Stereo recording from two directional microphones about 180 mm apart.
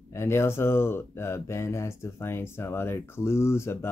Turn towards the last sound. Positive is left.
turn(degrees=15)  # may be behind; listen again after turning